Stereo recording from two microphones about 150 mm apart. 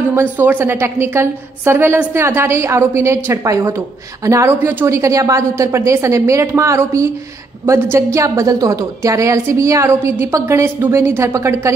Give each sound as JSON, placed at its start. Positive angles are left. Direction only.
{"t": 0.1, "sound": "a woman's voice", "side_deg": -15}